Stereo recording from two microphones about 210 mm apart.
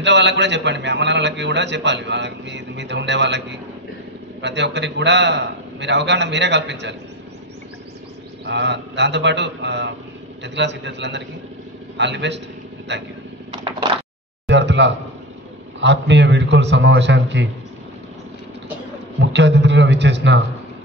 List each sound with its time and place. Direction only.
0.0 s a man's voice: 55° right (ahead or behind)
8.5 s a man's voice: 55° right (ahead or behind)
14.5 s a man's voice: 55° right (ahead or behind)
19.1 s a man's voice: 55° right (ahead or behind)